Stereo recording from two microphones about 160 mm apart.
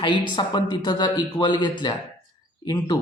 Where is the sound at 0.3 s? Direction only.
25° left (ahead or behind).